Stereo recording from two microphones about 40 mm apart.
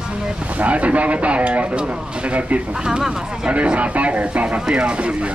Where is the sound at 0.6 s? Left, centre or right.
Right.